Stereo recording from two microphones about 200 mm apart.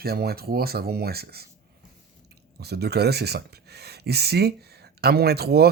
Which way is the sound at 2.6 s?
55° right (ahead or behind).